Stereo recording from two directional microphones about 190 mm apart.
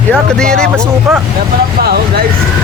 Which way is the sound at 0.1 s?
5° left (ahead or behind).